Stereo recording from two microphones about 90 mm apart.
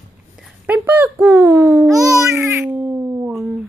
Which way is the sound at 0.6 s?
20° right (ahead or behind).